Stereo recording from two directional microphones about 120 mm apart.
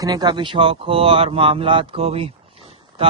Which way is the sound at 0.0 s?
35° right (ahead or behind).